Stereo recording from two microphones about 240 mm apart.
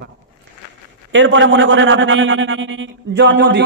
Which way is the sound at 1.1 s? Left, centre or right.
Right.